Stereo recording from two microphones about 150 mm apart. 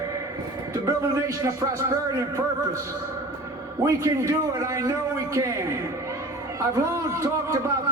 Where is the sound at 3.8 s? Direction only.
20° right (ahead or behind).